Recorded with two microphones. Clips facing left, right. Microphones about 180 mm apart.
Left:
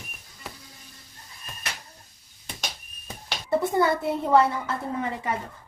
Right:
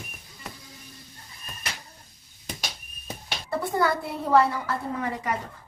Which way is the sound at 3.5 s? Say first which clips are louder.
Left 3 dB; 25° left (ahead or behind).